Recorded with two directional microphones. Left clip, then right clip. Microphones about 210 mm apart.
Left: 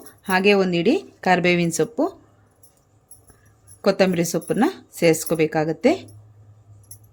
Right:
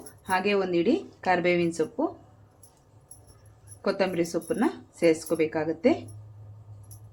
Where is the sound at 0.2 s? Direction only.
50° left (ahead or behind).